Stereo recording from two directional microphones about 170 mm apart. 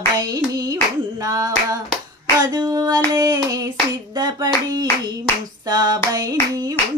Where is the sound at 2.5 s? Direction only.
20° right (ahead or behind).